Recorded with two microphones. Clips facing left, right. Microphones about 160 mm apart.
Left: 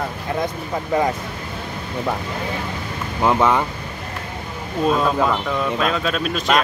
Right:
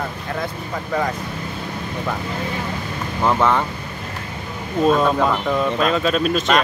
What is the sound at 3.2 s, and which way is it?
Speech, 10° left (ahead or behind).